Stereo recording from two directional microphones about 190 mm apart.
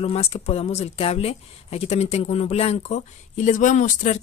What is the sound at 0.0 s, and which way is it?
Speech, 30° left (ahead or behind).